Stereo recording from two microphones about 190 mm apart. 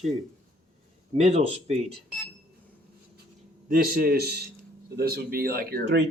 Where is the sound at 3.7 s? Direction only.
50° right (ahead or behind).